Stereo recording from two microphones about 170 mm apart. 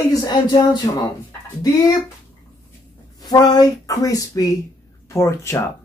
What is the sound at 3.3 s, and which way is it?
Speech, 25° left (ahead or behind).